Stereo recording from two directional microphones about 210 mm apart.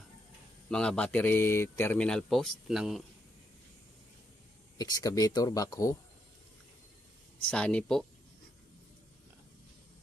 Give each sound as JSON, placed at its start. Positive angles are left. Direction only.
{"t": 0.7, "sound": "speech", "side_deg": 5}
{"t": 4.7, "sound": "speech", "side_deg": 20}
{"t": 7.4, "sound": "speech", "side_deg": 5}